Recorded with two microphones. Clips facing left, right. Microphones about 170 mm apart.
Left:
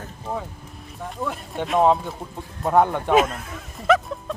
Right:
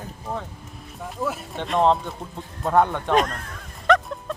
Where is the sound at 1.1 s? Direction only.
5° right (ahead or behind).